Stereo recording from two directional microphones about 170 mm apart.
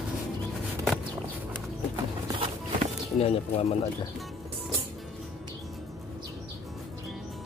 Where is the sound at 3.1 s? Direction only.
35° left (ahead or behind).